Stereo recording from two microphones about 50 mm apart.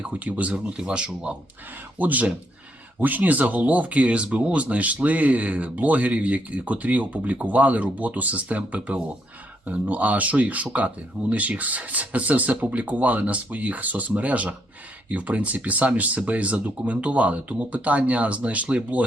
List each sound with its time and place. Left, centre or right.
0.0 s speech: right
0.5 s speech: centre
2.0 s speech: right